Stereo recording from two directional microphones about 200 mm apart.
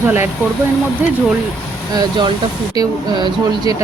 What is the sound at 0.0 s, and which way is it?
Speech, 10° right (ahead or behind).